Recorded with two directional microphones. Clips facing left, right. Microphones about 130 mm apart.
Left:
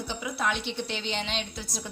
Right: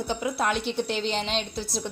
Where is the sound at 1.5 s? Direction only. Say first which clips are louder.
Right 7 dB; 30° right (ahead or behind).